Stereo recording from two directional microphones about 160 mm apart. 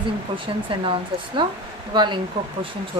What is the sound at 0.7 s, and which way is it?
Speech, 30° right (ahead or behind).